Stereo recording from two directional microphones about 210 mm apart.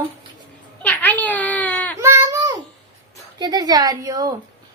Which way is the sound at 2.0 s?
15° right (ahead or behind).